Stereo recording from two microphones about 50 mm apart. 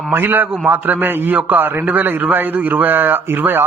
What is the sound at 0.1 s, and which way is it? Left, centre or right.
A man's voice, right.